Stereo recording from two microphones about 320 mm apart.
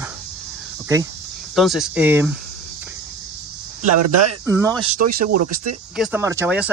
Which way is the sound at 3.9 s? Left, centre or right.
Right.